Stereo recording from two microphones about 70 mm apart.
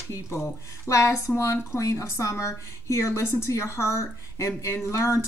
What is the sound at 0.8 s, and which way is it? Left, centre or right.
A woman's voice, left.